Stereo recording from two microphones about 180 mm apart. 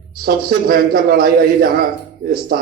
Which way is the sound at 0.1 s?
60° right (ahead or behind).